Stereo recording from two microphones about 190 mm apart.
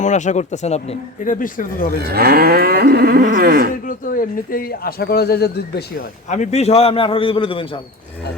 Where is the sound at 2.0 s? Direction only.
55° right (ahead or behind).